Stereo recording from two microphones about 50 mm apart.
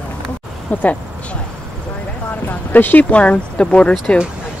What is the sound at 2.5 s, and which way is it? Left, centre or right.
Speech, left.